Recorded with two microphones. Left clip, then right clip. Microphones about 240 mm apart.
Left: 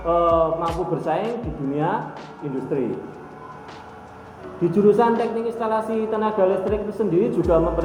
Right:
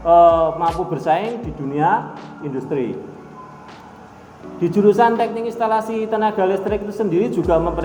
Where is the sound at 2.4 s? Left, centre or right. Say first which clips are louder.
Right 2 dB; right.